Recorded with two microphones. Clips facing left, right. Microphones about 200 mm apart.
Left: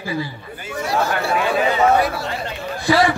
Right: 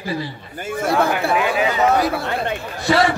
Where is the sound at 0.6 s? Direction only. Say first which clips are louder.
Right 3 dB; 55° right (ahead or behind).